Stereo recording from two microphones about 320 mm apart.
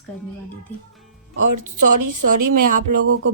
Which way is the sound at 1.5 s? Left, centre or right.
Right.